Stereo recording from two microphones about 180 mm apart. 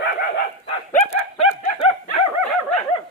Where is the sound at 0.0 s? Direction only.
60° left (ahead or behind).